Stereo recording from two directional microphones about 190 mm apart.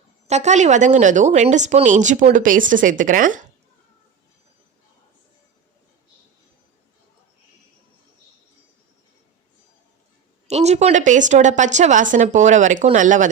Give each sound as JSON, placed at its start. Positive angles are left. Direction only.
{"t": 0.3, "sound": "speech", "side_deg": -35}
{"t": 10.5, "sound": "speech", "side_deg": -35}